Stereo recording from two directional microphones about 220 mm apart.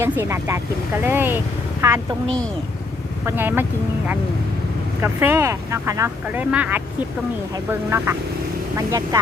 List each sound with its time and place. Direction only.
0.0 s speech: 10° right (ahead or behind)
3.2 s speech: 10° right (ahead or behind)
5.0 s speech: 10° right (ahead or behind)